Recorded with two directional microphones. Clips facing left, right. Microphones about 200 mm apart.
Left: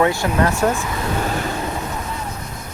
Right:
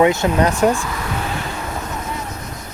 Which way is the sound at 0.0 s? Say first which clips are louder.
Right 3 dB; 20° right (ahead or behind).